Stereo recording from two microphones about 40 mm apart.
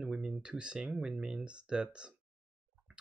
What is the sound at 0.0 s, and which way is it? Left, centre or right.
Speech, centre.